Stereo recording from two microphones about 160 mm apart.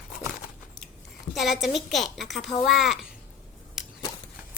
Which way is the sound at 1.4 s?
Centre (ahead or behind).